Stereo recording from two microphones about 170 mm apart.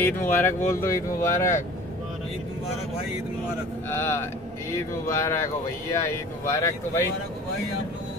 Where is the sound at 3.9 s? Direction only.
15° left (ahead or behind).